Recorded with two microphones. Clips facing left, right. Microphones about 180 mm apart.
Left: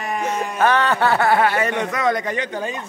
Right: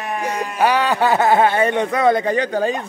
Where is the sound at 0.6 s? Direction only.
10° right (ahead or behind).